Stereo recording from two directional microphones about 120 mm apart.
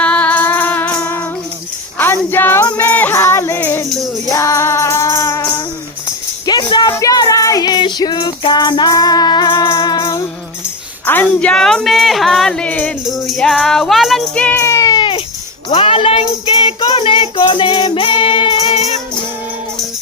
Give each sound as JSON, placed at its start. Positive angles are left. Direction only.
{"t": 0.0, "sound": "music", "side_deg": 10}
{"t": 2.0, "sound": "female singing", "side_deg": 15}
{"t": 4.3, "sound": "music", "side_deg": 25}
{"t": 6.4, "sound": "music", "side_deg": 35}
{"t": 6.9, "sound": "child singing", "side_deg": 30}
{"t": 11.0, "sound": "speech", "side_deg": 15}
{"t": 13.1, "sound": "speech", "side_deg": 0}
{"t": 14.3, "sound": "music", "side_deg": 10}
{"t": 14.6, "sound": "a sound", "side_deg": 25}
{"t": 15.7, "sound": "singing", "side_deg": 45}
{"t": 18.7, "sound": "music", "side_deg": 65}